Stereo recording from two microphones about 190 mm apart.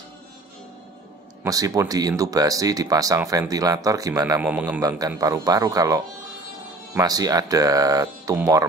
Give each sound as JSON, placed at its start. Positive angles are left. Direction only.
{"t": 1.4, "sound": "speech", "side_deg": -20}